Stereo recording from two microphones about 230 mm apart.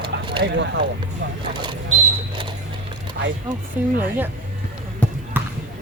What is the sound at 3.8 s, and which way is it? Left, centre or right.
Speech, centre.